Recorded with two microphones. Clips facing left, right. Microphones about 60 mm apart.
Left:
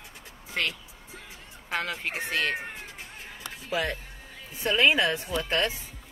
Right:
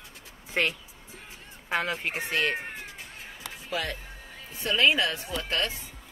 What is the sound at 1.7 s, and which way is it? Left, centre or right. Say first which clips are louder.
Speech: right 2 dB; centre.